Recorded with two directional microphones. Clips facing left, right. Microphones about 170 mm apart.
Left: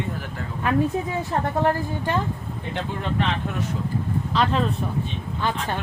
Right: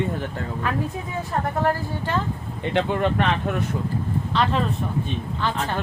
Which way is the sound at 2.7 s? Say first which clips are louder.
Right 7 dB; 65° right (ahead or behind).